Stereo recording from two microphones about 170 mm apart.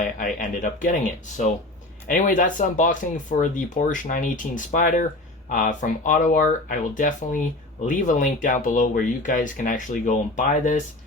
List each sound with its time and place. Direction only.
0.2 s speech: 50° left (ahead or behind)
2.0 s speech: 50° left (ahead or behind)